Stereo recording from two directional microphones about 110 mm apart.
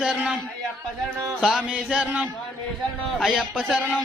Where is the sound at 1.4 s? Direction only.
5° right (ahead or behind).